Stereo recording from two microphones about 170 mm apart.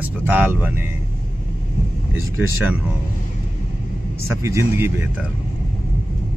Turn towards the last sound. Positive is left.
turn(degrees=-15)  # may be behind; listen again after turning